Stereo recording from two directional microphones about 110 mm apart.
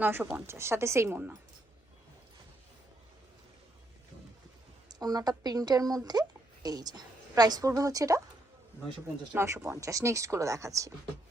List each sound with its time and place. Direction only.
0.0 s speech: 15° right (ahead or behind)
4.9 s a woman's voice: 35° right (ahead or behind)
9.4 s speech: 25° right (ahead or behind)